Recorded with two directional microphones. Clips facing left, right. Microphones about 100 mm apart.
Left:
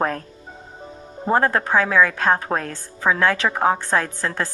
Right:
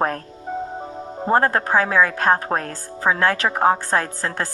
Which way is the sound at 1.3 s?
40° right (ahead or behind).